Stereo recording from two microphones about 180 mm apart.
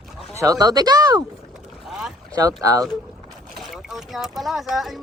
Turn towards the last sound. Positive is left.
turn(degrees=0)  # may be behind; listen again after turning